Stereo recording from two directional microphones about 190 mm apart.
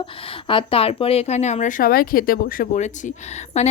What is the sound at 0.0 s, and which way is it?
A woman's voice, 25° left (ahead or behind).